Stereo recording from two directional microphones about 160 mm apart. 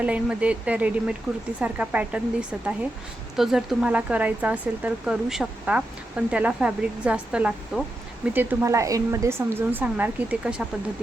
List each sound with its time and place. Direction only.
0.0 s speech: 5° right (ahead or behind)